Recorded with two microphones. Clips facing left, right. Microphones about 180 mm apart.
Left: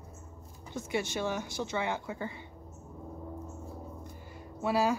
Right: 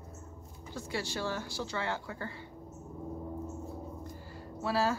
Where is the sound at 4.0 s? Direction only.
20° left (ahead or behind).